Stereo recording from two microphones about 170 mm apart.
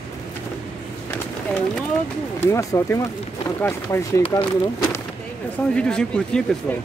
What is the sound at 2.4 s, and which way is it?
Speech, 15° left (ahead or behind).